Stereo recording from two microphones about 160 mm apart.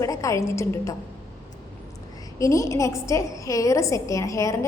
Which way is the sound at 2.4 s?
20° left (ahead or behind).